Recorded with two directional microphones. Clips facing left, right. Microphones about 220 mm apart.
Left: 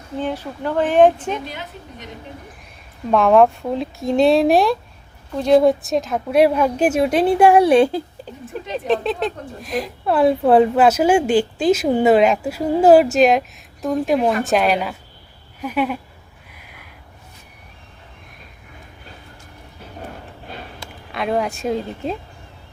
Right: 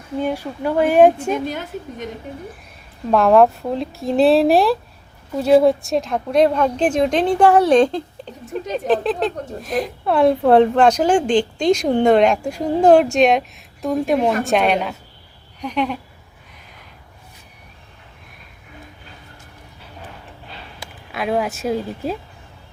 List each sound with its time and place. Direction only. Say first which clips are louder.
0.2 s speech: right 2 dB; 10° right (ahead or behind)
1.5 s a woman's voice: right 7 dB; 50° right (ahead or behind)
3.1 s a woman's voice: even; centre (ahead or behind)
21.1 s a woman's voice: even; centre (ahead or behind)